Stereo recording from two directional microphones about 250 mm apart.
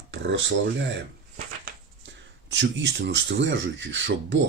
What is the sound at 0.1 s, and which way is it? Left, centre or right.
Speech, right.